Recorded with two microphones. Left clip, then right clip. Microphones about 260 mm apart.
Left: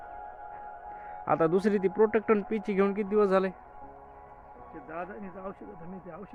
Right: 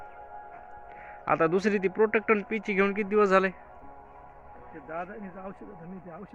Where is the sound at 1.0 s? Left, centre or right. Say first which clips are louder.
Right 1 dB; centre.